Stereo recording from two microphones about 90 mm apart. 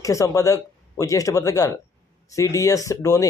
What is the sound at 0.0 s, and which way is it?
Speech, 35° left (ahead or behind).